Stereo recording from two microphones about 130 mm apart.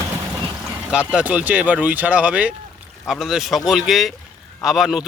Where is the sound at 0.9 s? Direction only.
10° right (ahead or behind).